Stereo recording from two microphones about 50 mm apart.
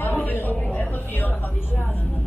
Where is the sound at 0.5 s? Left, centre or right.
Left.